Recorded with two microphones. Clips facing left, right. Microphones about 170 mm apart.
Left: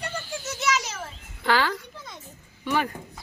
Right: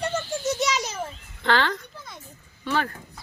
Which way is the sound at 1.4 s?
10° left (ahead or behind).